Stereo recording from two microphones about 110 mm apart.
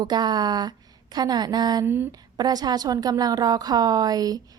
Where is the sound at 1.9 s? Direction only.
20° right (ahead or behind).